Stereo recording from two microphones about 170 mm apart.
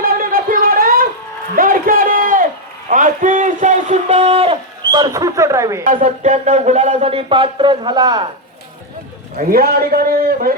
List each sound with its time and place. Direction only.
0.0 s a sound: 60° right (ahead or behind); by 5.8 s 15° right (ahead or behind)
5.8 s speech: 50° right (ahead or behind); by 8.3 s 25° right (ahead or behind)
9.5 s a man's voice: 60° right (ahead or behind)